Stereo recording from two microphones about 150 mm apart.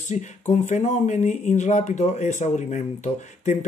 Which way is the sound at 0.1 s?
50° left (ahead or behind).